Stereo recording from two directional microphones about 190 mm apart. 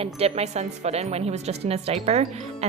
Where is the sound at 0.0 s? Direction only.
35° right (ahead or behind).